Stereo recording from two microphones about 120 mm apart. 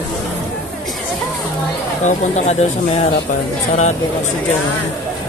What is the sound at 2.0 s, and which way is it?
Speech, 65° left (ahead or behind).